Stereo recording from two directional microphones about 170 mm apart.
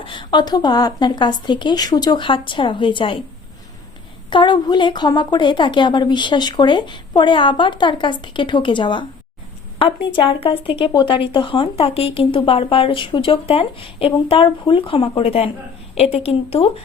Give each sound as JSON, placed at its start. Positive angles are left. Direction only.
{"t": 0.0, "sound": "speech", "side_deg": 30}
{"t": 4.3, "sound": "speech", "side_deg": 25}